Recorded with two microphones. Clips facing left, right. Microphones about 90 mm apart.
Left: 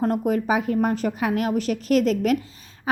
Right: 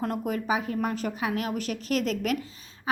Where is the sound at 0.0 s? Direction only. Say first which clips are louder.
Left 7 dB; 40° left (ahead or behind).